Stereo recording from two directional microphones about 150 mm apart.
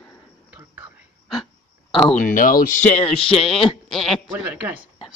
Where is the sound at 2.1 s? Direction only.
60° left (ahead or behind).